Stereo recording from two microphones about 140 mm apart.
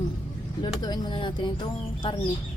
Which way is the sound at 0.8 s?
30° left (ahead or behind).